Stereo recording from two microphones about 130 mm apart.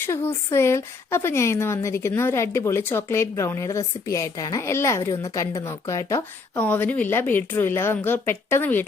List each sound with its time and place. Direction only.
0.0 s speech: 20° left (ahead or behind)
6.6 s a woman's voice: 10° left (ahead or behind)